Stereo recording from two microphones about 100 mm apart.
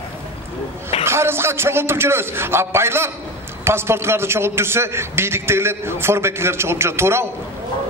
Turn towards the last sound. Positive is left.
turn(degrees=-25)  # may be behind; listen again after turning